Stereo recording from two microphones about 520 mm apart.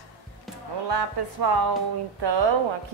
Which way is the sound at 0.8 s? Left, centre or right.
Right.